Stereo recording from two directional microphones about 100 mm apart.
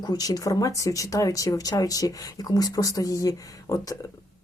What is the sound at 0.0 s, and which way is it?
Speech, 40° left (ahead or behind).